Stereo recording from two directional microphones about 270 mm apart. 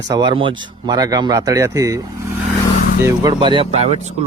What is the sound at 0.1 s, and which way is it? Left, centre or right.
Speech, centre.